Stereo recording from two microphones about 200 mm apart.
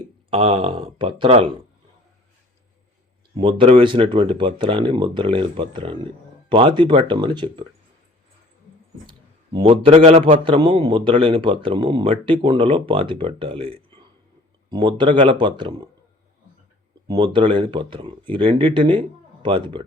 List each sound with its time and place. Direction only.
0.3 s a man's voice: 30° right (ahead or behind)
3.3 s a man's voice: 25° right (ahead or behind)
9.0 s a man's voice: 20° right (ahead or behind)
17.1 s a man's voice: 25° right (ahead or behind)